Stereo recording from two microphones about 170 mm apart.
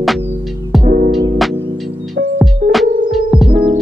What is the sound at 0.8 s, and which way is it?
Music, 55° right (ahead or behind).